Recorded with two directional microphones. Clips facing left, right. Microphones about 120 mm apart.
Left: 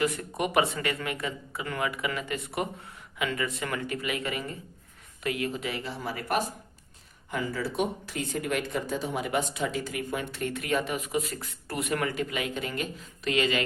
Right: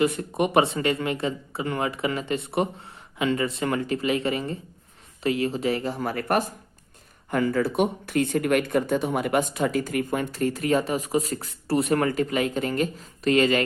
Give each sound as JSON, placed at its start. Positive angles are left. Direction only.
{"t": 0.0, "sound": "speech", "side_deg": -25}
{"t": 10.4, "sound": "speech", "side_deg": -35}